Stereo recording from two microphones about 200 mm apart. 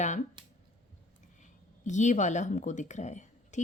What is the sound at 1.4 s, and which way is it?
Speech, 35° left (ahead or behind).